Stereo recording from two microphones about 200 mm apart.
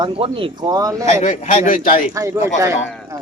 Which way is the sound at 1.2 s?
40° left (ahead or behind).